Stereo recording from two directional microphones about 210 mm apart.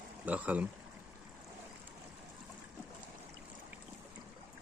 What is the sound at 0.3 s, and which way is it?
Speech, 5° right (ahead or behind).